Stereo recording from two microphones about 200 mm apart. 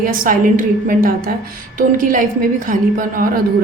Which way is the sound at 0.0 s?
45° right (ahead or behind).